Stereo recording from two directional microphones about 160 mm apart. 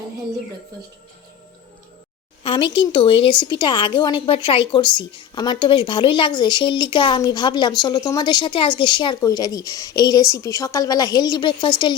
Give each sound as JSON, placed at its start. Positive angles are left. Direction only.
{"t": 2.4, "sound": "speech", "side_deg": 30}